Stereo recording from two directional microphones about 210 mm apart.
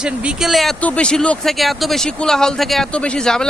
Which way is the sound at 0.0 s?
5° right (ahead or behind).